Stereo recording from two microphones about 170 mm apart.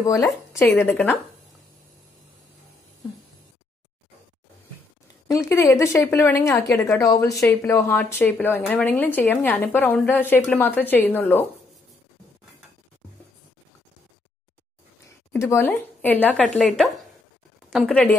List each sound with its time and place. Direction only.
0.0 s a woman's voice: 20° left (ahead or behind)
5.3 s a woman's voice: 15° left (ahead or behind)
15.3 s a woman's voice: 15° left (ahead or behind)